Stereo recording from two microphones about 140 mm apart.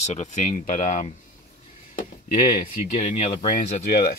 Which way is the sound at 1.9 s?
90° left.